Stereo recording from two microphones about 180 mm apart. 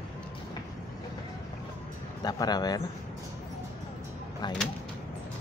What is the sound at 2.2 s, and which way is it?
Speech, 20° left (ahead or behind).